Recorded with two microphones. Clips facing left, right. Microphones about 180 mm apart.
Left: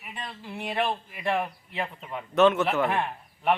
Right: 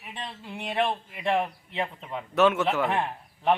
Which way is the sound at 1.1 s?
20° right (ahead or behind).